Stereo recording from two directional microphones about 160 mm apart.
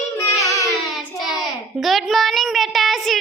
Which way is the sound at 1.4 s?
Centre (ahead or behind).